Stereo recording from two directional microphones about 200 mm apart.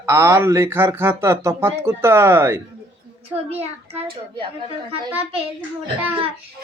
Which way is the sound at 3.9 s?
25° right (ahead or behind).